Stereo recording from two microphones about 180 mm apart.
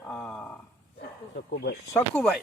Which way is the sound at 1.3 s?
60° left (ahead or behind).